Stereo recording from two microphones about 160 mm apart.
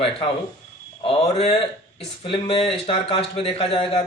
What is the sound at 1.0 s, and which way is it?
Speech, 35° left (ahead or behind).